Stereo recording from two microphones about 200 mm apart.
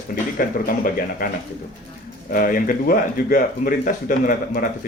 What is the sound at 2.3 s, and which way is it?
Speech, 45° left (ahead or behind).